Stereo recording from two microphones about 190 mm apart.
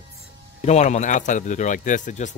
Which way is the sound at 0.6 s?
35° left (ahead or behind).